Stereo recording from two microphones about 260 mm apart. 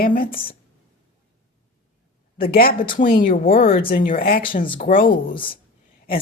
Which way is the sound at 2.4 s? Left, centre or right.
Left.